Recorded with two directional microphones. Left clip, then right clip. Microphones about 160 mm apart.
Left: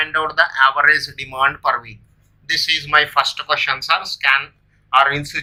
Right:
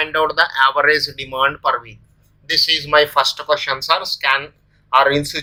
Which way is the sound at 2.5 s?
35° right (ahead or behind).